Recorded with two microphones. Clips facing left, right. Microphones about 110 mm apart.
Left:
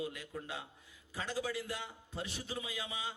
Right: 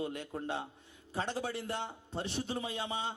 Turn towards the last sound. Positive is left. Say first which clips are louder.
# right 5 dB
turn(degrees=-30)  # may be behind; listen again after turning